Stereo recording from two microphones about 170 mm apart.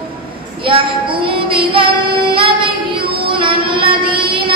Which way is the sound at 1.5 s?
30° right (ahead or behind).